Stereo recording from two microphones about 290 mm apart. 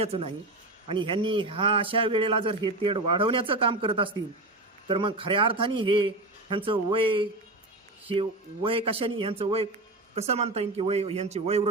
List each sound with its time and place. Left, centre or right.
0.0 s a man's voice: centre